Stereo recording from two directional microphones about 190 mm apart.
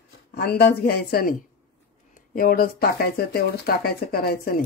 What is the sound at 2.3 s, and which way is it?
Speech, 50° left (ahead or behind).